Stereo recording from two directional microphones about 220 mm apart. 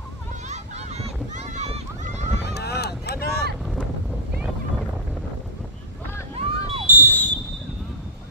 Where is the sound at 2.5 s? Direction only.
50° left (ahead or behind).